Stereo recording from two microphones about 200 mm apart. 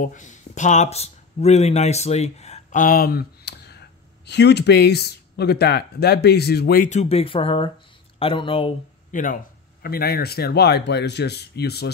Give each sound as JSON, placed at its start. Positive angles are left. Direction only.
{"t": 0.0, "sound": "speech", "side_deg": 40}
{"t": 9.1, "sound": "speech", "side_deg": 40}